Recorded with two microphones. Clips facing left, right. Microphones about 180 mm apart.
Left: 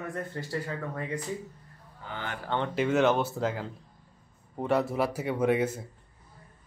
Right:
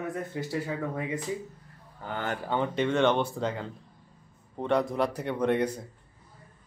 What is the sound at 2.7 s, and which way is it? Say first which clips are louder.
A man's voice: left 1 dB; 5° left (ahead or behind).